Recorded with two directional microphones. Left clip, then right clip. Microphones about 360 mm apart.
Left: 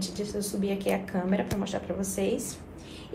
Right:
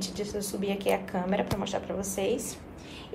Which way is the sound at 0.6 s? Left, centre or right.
Centre.